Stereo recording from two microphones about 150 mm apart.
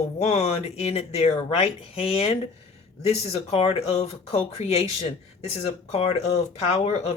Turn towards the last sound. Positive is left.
turn(degrees=45)  # may be behind; listen again after turning